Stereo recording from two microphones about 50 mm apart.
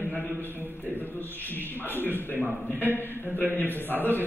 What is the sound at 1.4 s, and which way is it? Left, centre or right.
Speech, left.